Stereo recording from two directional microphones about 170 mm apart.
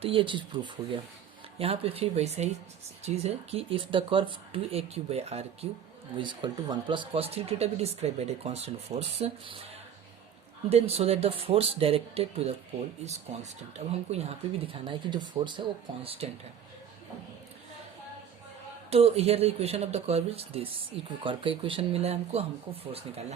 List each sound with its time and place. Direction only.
0.0 s speech: 30° right (ahead or behind)
6.1 s speech: 25° right (ahead or behind)
10.7 s speech: 35° right (ahead or behind)
18.9 s speech: 35° right (ahead or behind)